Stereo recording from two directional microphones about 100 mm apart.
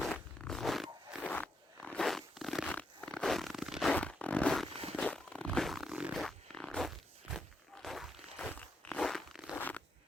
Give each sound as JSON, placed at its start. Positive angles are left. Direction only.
{"t": 0.0, "sound": "zipper", "side_deg": 5}
{"t": 1.2, "sound": "a sound", "side_deg": 15}
{"t": 2.0, "sound": "zipper", "side_deg": 0}
{"t": 3.9, "sound": "zipper", "side_deg": 15}
{"t": 4.9, "sound": "a sound", "side_deg": 10}
{"t": 6.1, "sound": "zipper", "side_deg": 5}
{"t": 8.4, "sound": "crunch", "side_deg": 10}
{"t": 9.6, "sound": "crunch", "side_deg": 15}